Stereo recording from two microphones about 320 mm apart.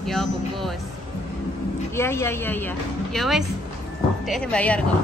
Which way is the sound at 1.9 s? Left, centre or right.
Centre.